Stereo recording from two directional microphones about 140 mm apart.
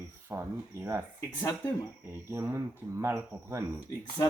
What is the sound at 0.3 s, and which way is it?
Speech, 20° right (ahead or behind).